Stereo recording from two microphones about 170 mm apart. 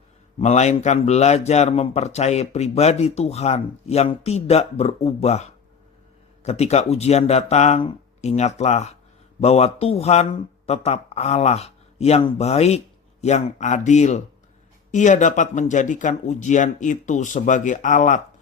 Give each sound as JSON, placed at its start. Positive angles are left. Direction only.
{"t": 0.3, "sound": "a man's voice", "side_deg": 40}